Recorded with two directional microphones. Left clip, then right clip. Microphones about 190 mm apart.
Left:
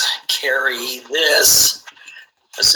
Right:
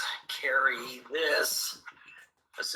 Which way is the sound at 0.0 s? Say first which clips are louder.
Left 14 dB; 50° left (ahead or behind).